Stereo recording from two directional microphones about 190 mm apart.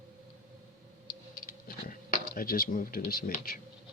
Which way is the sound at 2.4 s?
50° left (ahead or behind).